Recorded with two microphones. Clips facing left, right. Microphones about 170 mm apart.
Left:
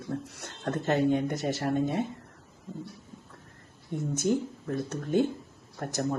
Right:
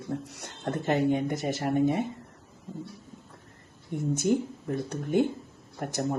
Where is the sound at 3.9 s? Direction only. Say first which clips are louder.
Right 2 dB; 15° right (ahead or behind).